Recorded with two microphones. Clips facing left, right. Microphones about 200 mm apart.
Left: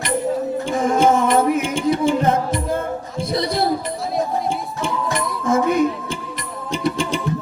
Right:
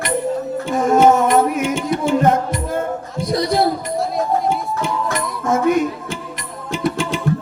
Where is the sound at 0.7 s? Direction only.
50° right (ahead or behind).